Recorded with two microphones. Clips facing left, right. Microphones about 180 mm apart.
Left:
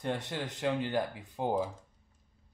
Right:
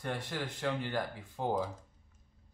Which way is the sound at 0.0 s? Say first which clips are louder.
Left 3 dB; 20° left (ahead or behind).